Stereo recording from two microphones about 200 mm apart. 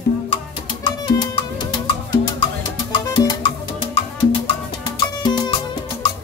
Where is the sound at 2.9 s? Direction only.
20° left (ahead or behind).